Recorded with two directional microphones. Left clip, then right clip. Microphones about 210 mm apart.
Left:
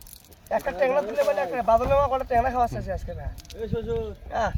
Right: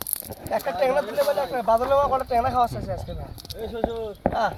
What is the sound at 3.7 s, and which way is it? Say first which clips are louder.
Speech: right 1 dB; 30° right (ahead or behind).